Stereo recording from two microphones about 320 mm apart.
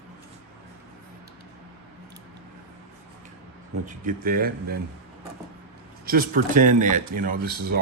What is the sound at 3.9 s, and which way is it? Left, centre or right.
Speech, right.